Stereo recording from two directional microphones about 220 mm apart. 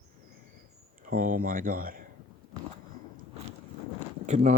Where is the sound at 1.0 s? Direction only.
40° right (ahead or behind).